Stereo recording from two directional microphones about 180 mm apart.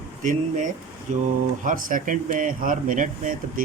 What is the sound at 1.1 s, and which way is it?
Speech, 45° right (ahead or behind).